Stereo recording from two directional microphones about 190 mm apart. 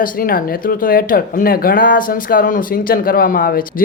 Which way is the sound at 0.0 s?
45° left (ahead or behind).